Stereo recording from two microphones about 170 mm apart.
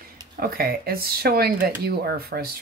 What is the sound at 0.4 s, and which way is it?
Speech, 65° right (ahead or behind).